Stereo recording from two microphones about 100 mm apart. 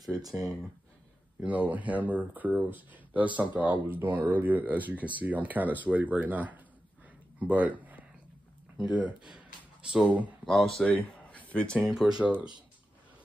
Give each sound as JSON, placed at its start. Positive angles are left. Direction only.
{"t": 0.2, "sound": "speech", "side_deg": -35}
{"t": 1.4, "sound": "speech", "side_deg": -15}
{"t": 12.2, "sound": "speech", "side_deg": -10}